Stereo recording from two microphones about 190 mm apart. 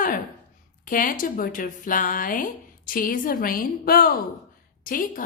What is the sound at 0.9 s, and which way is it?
Speech, 45° left (ahead or behind).